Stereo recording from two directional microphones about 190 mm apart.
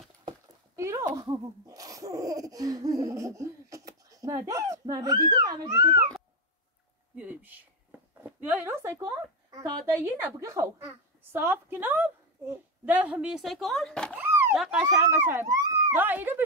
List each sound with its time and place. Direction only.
0.7 s speech: 15° right (ahead or behind)
7.2 s a woman's voice: 10° right (ahead or behind)
14.1 s a sound: 10° right (ahead or behind)
14.6 s speech: 5° right (ahead or behind)